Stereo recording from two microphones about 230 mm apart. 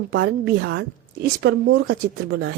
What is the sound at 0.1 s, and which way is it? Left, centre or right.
Speech, right.